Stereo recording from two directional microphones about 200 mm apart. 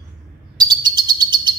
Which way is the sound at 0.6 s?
20° right (ahead or behind).